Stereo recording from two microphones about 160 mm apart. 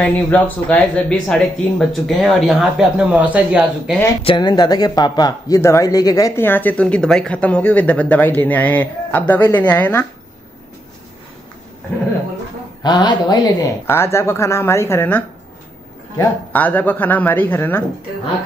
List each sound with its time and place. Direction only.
0.0 s speech: 10° left (ahead or behind)
4.2 s speech: 30° left (ahead or behind); by 10.0 s 10° left (ahead or behind)
12.8 s speech: 25° left (ahead or behind)
16.5 s speech: 10° left (ahead or behind)